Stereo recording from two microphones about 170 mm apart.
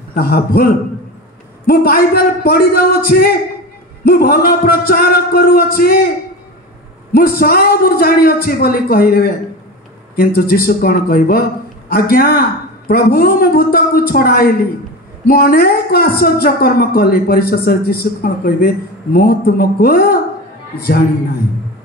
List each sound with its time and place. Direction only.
0.1 s a woman's voice: 65° left (ahead or behind)
1.7 s a woman's voice: 60° left (ahead or behind)
7.1 s a woman's voice: 60° left (ahead or behind)